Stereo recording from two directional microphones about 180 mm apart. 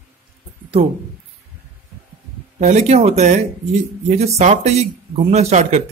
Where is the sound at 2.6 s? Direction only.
40° right (ahead or behind).